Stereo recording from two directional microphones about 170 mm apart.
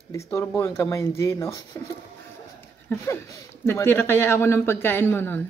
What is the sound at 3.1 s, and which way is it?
Speech, 15° left (ahead or behind).